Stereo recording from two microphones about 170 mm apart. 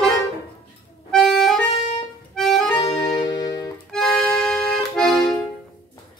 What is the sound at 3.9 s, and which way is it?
Accordion, 5° left (ahead or behind).